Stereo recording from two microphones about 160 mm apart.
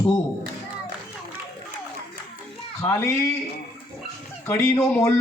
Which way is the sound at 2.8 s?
15° left (ahead or behind).